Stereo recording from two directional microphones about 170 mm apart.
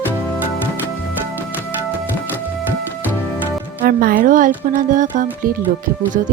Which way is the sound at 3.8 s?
60° right (ahead or behind).